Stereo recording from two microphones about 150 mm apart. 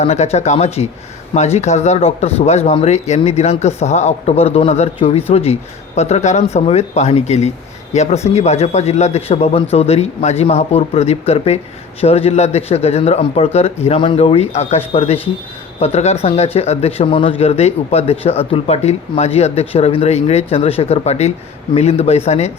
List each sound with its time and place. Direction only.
0.0 s speech: 45° left (ahead or behind)